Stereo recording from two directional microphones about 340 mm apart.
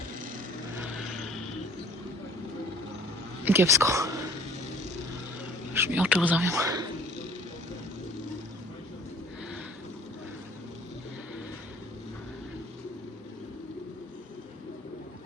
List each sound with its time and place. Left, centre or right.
3.4 s speech: centre
5.7 s speech: centre